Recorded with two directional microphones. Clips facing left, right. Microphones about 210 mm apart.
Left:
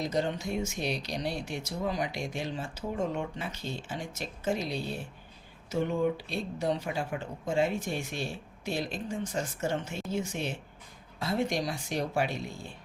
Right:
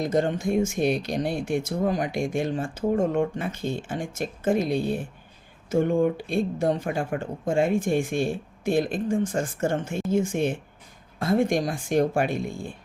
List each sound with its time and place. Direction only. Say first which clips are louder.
0.0 s speech: right 7 dB; 50° right (ahead or behind)